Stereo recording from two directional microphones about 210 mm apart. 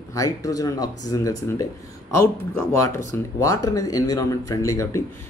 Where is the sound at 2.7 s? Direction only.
15° left (ahead or behind).